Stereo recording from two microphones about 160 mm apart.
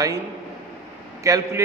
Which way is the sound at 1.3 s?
20° right (ahead or behind).